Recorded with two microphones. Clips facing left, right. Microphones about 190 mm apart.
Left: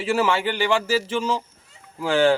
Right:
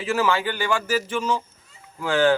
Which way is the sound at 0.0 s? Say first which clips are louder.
Left 1 dB; 30° left (ahead or behind).